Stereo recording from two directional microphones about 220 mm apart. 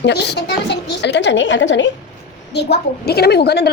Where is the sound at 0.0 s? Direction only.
50° left (ahead or behind).